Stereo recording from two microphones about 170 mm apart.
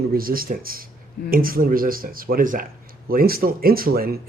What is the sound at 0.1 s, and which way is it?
Speech, 60° right (ahead or behind).